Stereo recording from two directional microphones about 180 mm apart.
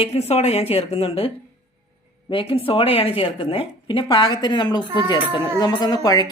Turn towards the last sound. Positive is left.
turn(degrees=20)  # may be behind; listen again after turning